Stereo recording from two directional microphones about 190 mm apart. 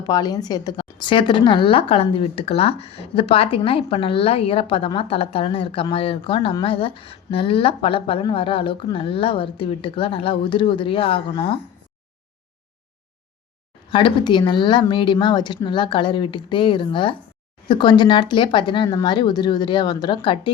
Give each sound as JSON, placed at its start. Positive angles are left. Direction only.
{"t": 0.0, "sound": "a woman's voice", "side_deg": 20}
{"t": 13.9, "sound": "a woman's voice", "side_deg": 25}